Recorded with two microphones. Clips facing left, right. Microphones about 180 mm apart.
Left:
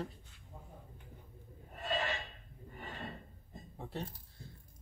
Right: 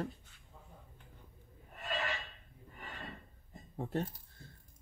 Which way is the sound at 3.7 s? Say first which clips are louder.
Right 7 dB; 50° right (ahead or behind).